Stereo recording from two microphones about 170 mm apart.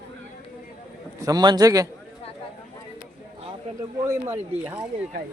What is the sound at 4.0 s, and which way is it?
Speech, 15° right (ahead or behind).